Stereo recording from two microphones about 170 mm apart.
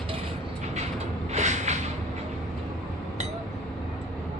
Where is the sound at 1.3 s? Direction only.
45° right (ahead or behind).